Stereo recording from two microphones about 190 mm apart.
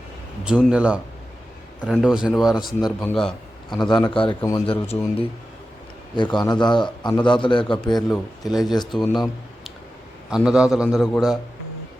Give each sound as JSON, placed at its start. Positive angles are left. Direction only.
{"t": 0.4, "sound": "a man's voice", "side_deg": -5}
{"t": 3.7, "sound": "a man's voice", "side_deg": 25}
{"t": 4.6, "sound": "a man's voice", "side_deg": 30}
{"t": 8.1, "sound": "a man's voice", "side_deg": 0}
{"t": 9.1, "sound": "a sound", "side_deg": 0}
{"t": 10.2, "sound": "a man's voice", "side_deg": -5}